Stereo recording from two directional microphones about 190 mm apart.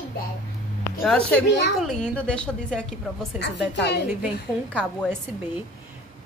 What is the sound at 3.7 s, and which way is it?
Speech, 60° left (ahead or behind).